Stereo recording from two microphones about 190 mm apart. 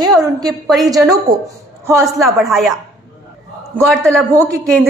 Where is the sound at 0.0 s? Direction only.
20° right (ahead or behind).